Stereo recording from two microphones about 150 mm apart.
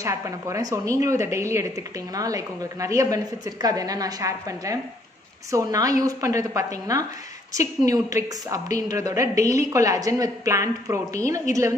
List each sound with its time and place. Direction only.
0.0 s a woman's voice: 20° right (ahead or behind)